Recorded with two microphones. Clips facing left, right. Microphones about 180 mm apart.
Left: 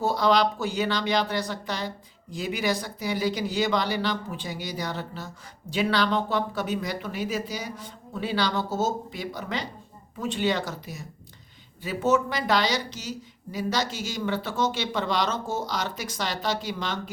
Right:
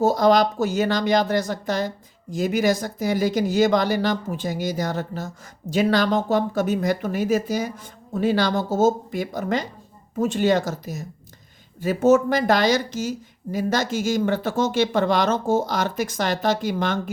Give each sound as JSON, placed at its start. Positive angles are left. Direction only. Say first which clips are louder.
{"t": 0.0, "sound": "speech", "louder": "right 5 dB", "side_deg": -45}